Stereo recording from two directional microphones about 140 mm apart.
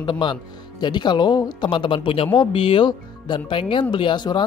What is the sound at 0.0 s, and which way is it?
Speech, 35° left (ahead or behind).